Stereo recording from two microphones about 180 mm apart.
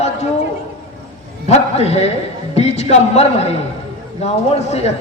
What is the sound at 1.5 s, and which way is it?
Speech, 35° left (ahead or behind).